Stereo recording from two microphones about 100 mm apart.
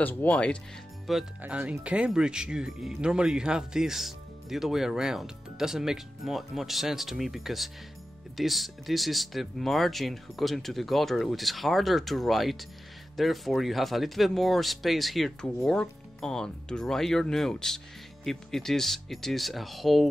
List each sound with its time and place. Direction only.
0.0 s speech: 15° left (ahead or behind)
1.1 s speech: centre (ahead or behind)
1.4 s speech: 15° right (ahead or behind)